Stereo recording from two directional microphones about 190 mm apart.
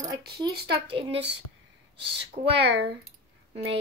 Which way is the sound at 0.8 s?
30° right (ahead or behind).